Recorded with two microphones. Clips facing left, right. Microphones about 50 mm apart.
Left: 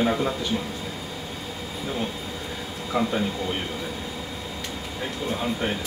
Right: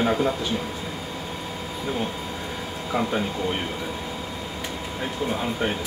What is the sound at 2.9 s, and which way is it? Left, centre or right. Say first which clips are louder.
Speech: even; centre.